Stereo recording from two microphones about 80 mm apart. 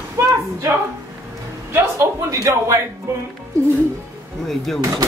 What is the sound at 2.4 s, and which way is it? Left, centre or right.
Speech, right.